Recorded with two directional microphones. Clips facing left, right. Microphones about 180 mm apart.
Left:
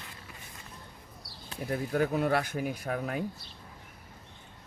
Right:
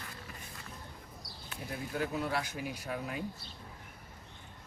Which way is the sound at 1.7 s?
60° left (ahead or behind).